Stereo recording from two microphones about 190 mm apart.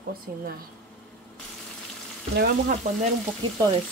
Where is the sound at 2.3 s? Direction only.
55° right (ahead or behind).